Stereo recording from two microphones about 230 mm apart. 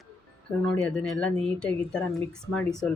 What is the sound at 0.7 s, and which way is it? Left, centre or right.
Speech, centre.